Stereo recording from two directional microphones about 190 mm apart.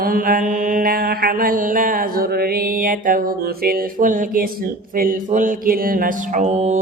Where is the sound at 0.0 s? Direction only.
50° right (ahead or behind).